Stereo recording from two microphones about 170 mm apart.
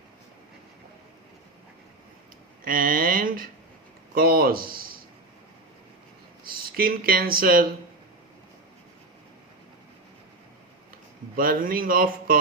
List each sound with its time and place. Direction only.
2.6 s speech: 55° right (ahead or behind)
6.5 s speech: 60° right (ahead or behind)
11.3 s speech: 55° right (ahead or behind)